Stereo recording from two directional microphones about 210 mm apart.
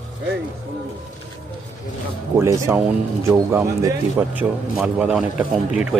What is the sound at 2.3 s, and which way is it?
A man's voice, 10° right (ahead or behind).